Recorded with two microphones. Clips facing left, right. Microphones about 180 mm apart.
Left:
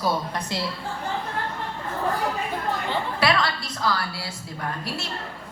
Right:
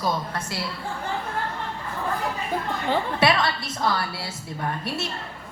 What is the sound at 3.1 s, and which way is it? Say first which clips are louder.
A woman's voice: left 1 dB; 25° right (ahead or behind).